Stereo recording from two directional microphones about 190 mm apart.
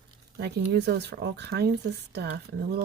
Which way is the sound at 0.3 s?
60° right (ahead or behind).